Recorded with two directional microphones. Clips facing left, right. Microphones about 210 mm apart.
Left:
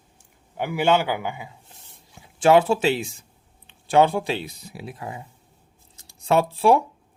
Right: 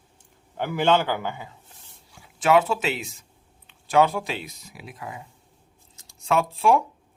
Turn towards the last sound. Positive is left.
turn(degrees=35)  # may be behind; listen again after turning